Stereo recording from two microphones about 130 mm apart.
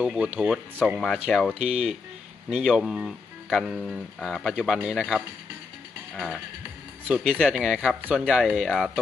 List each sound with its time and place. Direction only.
0.0 s speech: 10° right (ahead or behind)
1.3 s speech: 5° left (ahead or behind)
1.5 s speech: 55° right (ahead or behind)
2.5 s speech: 5° right (ahead or behind)
7.3 s speech: 5° left (ahead or behind)